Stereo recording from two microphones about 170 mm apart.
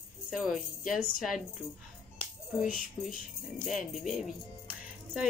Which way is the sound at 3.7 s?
Centre (ahead or behind).